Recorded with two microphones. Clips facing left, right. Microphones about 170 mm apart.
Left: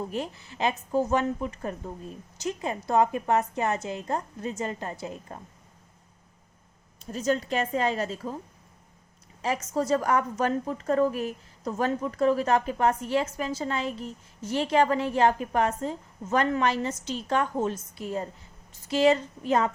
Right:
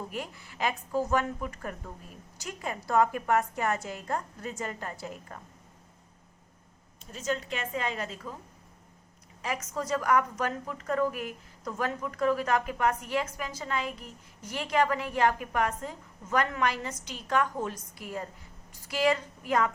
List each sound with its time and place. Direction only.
0.1 s a woman's voice: 25° left (ahead or behind)
7.1 s a woman's voice: 40° left (ahead or behind)
9.4 s a woman's voice: 30° left (ahead or behind)